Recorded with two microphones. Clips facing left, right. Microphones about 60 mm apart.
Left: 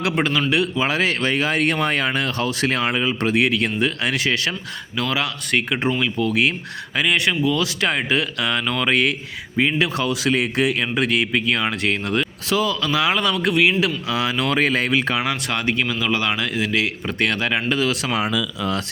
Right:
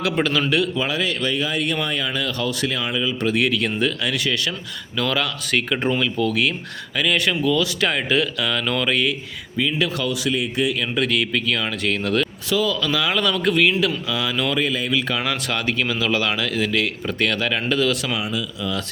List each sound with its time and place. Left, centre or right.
0.5 s speech: left
0.9 s speech: left
3.2 s speech: left
4.9 s speech: left
7.5 s speech: left
9.6 s speech: left
10.2 s speech: left
10.9 s speech: left
14.5 s speech: left
14.8 s speech: left
15.1 s a man's voice: centre
16.7 s speech: left